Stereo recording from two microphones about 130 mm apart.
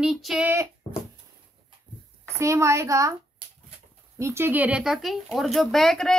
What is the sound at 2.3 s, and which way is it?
Speech, 20° right (ahead or behind).